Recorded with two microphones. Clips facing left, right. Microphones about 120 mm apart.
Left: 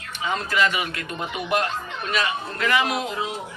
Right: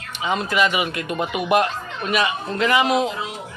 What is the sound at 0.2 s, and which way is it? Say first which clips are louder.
A man's voice: right 3 dB; 20° right (ahead or behind).